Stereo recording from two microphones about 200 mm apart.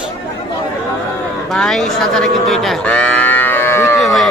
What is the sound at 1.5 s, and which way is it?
Speech, centre (ahead or behind).